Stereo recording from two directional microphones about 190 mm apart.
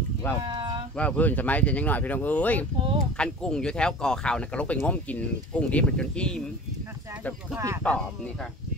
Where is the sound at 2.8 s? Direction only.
30° right (ahead or behind).